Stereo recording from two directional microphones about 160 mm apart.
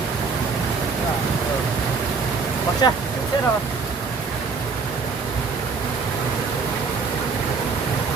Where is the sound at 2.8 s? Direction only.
25° left (ahead or behind).